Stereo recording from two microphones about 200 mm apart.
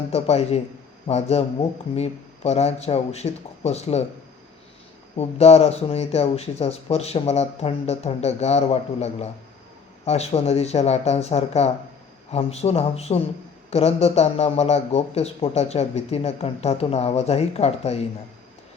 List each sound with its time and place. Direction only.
0.1 s speech: 30° left (ahead or behind)
5.1 s speech: 30° left (ahead or behind)